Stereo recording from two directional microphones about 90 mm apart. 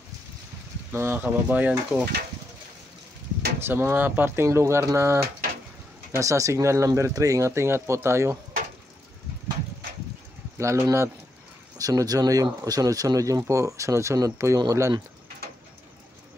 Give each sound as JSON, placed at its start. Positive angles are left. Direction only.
{"t": 0.9, "sound": "speech", "side_deg": -25}
{"t": 3.5, "sound": "speech", "side_deg": -25}
{"t": 10.6, "sound": "speech", "side_deg": -35}